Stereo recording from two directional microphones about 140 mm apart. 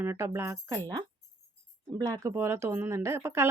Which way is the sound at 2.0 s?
25° right (ahead or behind).